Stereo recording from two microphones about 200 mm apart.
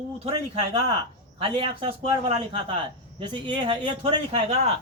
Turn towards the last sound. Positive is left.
turn(degrees=-30)  # may be behind; listen again after turning